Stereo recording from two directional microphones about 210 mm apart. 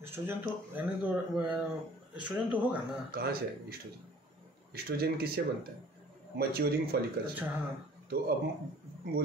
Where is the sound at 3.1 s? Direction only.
45° right (ahead or behind).